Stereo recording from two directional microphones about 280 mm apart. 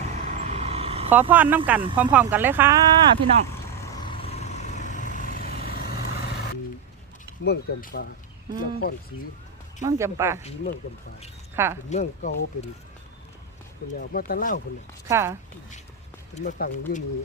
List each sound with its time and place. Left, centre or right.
0.3 s vehicle: right
1.1 s speech: centre
4.0 s vehicle: centre
7.4 s speech: left
9.8 s speech: centre
11.5 s speech: centre
11.9 s speech: left
14.0 s speech: left
15.0 s speech: centre
16.4 s speech: left